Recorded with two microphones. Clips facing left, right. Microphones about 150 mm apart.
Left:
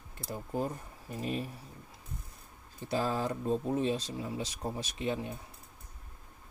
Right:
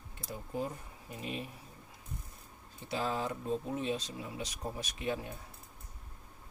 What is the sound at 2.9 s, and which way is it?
Speech, 40° left (ahead or behind).